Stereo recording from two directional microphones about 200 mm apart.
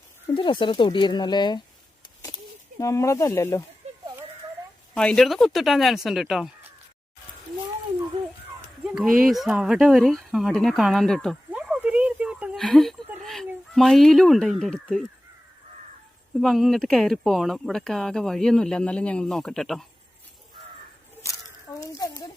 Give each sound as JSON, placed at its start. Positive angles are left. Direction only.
{"t": 0.3, "sound": "speech", "side_deg": 25}
{"t": 2.8, "sound": "speech", "side_deg": 15}
{"t": 3.8, "sound": "a sound", "side_deg": -35}
{"t": 4.9, "sound": "speech", "side_deg": 5}
{"t": 8.8, "sound": "speech", "side_deg": -5}
{"t": 16.4, "sound": "speech", "side_deg": 0}
{"t": 21.8, "sound": "a sound", "side_deg": 15}